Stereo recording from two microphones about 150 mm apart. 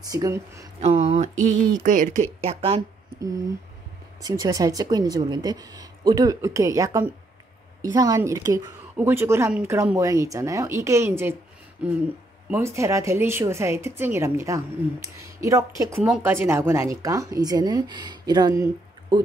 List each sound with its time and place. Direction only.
0.1 s speech: 20° right (ahead or behind)
0.7 s speech: 45° right (ahead or behind)
2.4 s a woman's voice: 40° right (ahead or behind)
4.2 s a woman's voice: 25° right (ahead or behind)